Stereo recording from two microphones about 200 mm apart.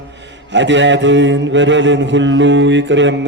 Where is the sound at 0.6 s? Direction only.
65° right (ahead or behind).